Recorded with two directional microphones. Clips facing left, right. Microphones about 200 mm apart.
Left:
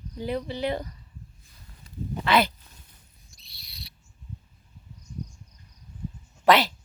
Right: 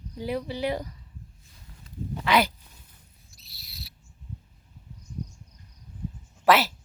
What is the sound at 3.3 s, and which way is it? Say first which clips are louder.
Owl: right 2 dB; 5° right (ahead or behind).